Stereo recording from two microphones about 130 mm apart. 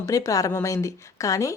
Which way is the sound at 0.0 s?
25° left (ahead or behind).